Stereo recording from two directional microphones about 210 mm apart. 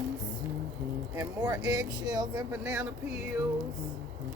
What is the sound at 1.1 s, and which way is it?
Speech, 15° right (ahead or behind).